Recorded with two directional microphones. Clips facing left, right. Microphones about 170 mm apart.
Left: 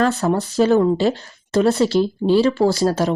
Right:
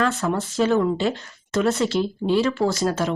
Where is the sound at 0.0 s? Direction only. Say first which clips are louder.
Left 4 dB; 40° left (ahead or behind).